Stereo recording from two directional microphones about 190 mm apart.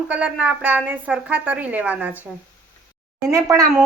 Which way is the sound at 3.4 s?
20° right (ahead or behind).